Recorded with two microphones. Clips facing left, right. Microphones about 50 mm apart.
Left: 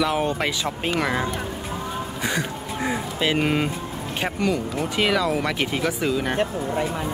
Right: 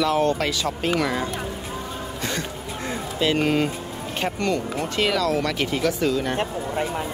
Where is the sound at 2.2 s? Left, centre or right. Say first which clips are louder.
Left 3 dB; centre.